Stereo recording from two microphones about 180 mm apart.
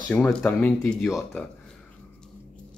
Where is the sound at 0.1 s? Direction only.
5° left (ahead or behind).